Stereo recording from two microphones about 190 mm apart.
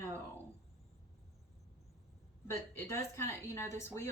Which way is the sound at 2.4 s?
15° left (ahead or behind).